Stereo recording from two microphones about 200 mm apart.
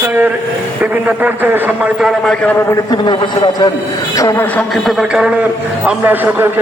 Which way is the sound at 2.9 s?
20° left (ahead or behind).